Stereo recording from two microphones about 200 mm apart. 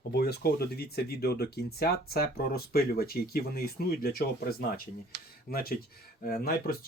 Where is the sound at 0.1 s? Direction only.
55° left (ahead or behind).